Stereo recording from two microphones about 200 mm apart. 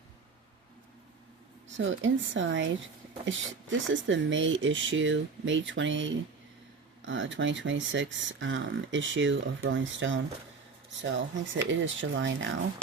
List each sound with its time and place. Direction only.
1.7 s speech: 70° right (ahead or behind)